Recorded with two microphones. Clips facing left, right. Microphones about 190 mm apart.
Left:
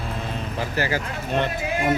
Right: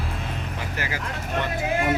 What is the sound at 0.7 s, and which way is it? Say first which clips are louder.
Speech: left 7 dB; 30° left (ahead or behind).